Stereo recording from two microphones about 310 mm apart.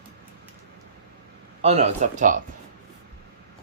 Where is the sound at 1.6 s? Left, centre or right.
Right.